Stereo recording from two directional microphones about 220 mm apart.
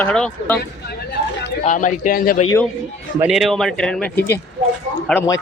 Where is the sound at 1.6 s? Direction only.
35° left (ahead or behind).